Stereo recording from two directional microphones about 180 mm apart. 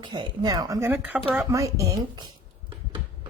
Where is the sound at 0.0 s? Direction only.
25° right (ahead or behind).